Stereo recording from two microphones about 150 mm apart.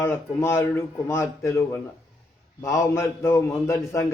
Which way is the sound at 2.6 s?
20° left (ahead or behind).